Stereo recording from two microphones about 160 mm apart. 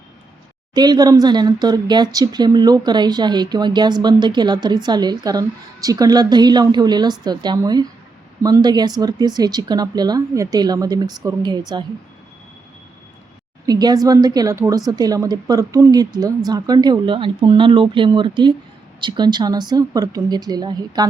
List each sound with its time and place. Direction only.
0.7 s speech: 25° right (ahead or behind)
13.7 s speech: 25° right (ahead or behind)